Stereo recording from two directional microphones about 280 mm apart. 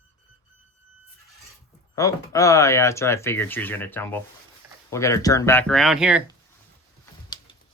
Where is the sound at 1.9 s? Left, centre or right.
Centre.